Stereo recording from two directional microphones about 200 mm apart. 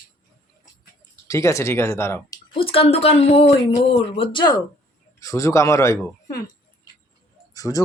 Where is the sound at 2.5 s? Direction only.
30° left (ahead or behind).